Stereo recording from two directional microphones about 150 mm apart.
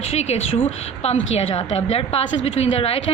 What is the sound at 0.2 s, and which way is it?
A woman's voice, 45° left (ahead or behind).